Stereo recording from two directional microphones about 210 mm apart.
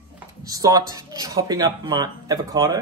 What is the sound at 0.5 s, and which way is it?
Speech, 15° right (ahead or behind).